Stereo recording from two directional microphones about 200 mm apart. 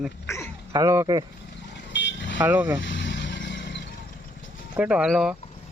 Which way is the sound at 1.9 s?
60° left (ahead or behind).